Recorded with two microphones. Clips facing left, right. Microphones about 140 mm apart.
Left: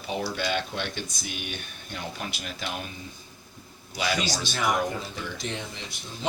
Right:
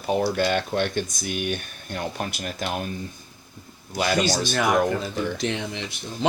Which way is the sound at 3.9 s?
50° right (ahead or behind).